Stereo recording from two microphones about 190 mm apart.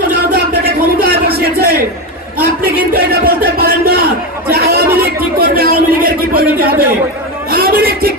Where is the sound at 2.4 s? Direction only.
55° right (ahead or behind).